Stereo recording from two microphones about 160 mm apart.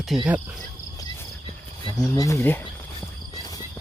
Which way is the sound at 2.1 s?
20° left (ahead or behind).